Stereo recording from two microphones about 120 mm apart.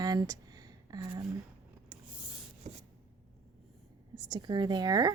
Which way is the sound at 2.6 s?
70° right (ahead or behind).